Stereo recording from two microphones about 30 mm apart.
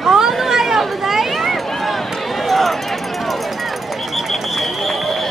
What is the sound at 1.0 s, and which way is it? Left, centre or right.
Run, centre.